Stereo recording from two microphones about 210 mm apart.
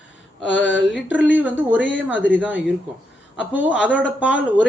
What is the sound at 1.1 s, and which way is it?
Speech, 5° right (ahead or behind).